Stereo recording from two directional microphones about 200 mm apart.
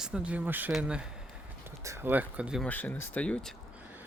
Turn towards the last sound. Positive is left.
turn(degrees=5)  # may be behind; listen again after turning